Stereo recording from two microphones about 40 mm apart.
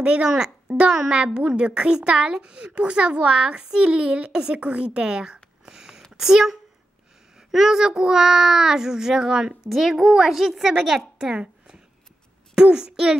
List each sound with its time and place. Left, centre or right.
0.0 s a child's voice: right
9.7 s a child's voice: centre
11.3 s a sound: right
12.5 s a child's voice: right